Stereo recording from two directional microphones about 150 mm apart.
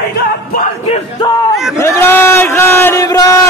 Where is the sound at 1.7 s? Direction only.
15° left (ahead or behind).